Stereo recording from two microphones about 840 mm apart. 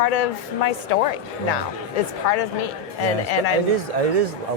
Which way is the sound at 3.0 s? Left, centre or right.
Left.